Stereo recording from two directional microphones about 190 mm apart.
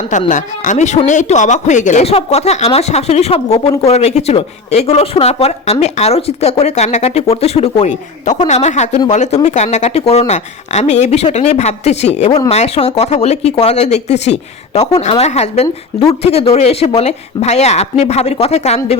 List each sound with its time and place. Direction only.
0.3 s speech: 45° left (ahead or behind)